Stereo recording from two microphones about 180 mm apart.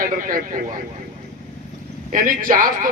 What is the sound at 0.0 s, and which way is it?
Speech, 50° right (ahead or behind).